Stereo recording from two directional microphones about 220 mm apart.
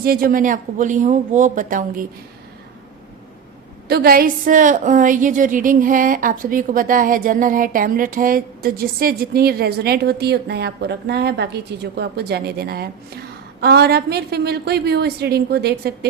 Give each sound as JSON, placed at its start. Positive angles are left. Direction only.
{"t": 0.0, "sound": "speech", "side_deg": -40}
{"t": 3.8, "sound": "a woman's voice", "side_deg": -45}